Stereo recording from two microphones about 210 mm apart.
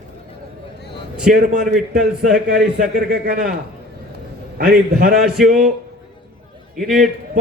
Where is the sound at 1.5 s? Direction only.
35° right (ahead or behind).